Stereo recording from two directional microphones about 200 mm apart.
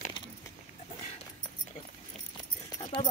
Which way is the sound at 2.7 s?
20° left (ahead or behind).